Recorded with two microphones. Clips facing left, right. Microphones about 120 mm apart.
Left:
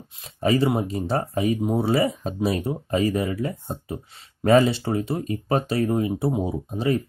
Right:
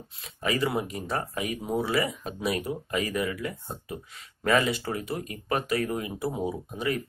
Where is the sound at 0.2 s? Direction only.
30° left (ahead or behind).